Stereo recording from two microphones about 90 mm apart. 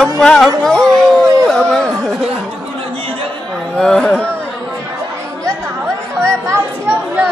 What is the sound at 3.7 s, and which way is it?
Speech, 5° left (ahead or behind).